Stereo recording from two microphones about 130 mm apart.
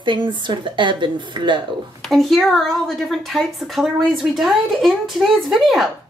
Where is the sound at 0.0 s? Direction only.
40° right (ahead or behind).